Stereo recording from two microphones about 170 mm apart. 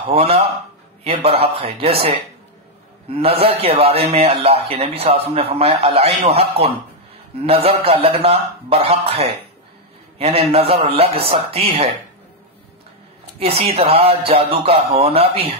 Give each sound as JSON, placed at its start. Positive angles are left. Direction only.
{"t": 0.1, "sound": "a man's voice", "side_deg": -35}
{"t": 3.1, "sound": "a man's voice", "side_deg": -35}
{"t": 7.4, "sound": "a man's voice", "side_deg": -35}
{"t": 13.4, "sound": "a man's voice", "side_deg": -35}